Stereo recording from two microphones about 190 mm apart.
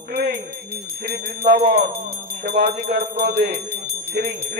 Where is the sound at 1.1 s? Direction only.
50° right (ahead or behind).